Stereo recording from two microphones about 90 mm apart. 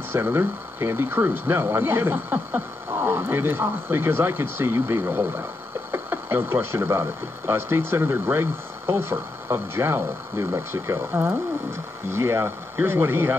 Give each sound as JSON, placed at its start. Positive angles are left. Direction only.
{"t": 0.1, "sound": "speech", "side_deg": -25}